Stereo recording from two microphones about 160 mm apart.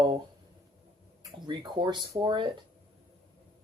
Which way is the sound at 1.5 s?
30° right (ahead or behind).